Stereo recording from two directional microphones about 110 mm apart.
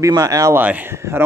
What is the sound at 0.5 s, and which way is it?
Speech, 15° right (ahead or behind).